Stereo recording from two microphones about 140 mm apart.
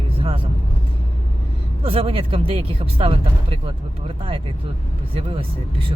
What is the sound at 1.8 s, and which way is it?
Speech, 40° right (ahead or behind).